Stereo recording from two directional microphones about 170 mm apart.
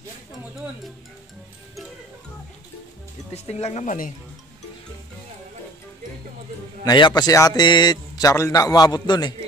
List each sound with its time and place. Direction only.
3.3 s speech: 40° left (ahead or behind)
6.8 s a man's voice: 25° left (ahead or behind)